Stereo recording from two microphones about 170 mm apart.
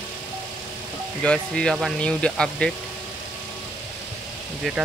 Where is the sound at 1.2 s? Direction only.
5° left (ahead or behind).